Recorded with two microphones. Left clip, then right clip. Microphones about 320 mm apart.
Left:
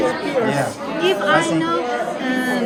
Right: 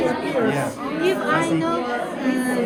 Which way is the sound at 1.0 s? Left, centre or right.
Left.